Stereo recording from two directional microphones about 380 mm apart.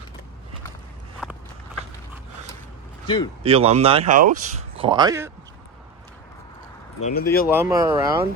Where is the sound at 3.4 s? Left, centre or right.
Centre.